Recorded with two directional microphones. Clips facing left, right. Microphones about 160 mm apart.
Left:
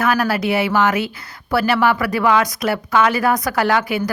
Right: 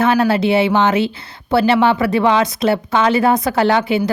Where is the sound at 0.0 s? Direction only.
25° right (ahead or behind).